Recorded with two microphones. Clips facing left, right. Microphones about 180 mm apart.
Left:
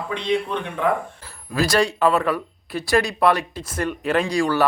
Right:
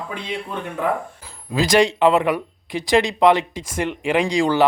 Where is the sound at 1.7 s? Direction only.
20° right (ahead or behind).